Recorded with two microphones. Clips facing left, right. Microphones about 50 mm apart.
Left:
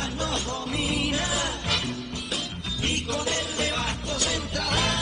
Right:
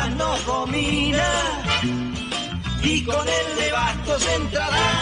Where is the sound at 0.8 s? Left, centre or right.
Right.